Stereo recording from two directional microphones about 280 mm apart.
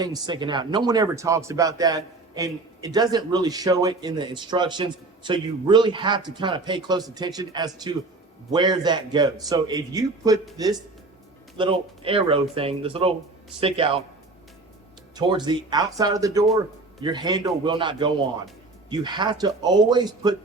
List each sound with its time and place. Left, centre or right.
0.0 s a man's voice: centre
11.5 s speech: centre
15.1 s a man's voice: centre